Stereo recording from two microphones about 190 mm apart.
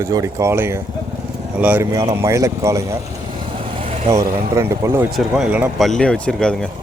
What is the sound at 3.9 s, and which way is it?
Vehicle, 35° right (ahead or behind).